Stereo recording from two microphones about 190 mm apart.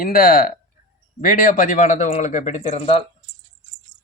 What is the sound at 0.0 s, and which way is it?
Speech, 50° left (ahead or behind).